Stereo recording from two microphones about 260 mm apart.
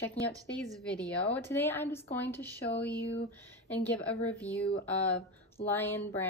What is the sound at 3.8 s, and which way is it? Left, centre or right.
Speech, centre.